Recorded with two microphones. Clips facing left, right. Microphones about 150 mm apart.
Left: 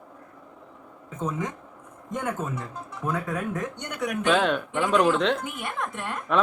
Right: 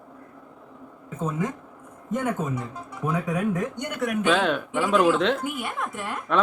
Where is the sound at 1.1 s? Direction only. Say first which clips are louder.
Right 2 dB; 10° right (ahead or behind).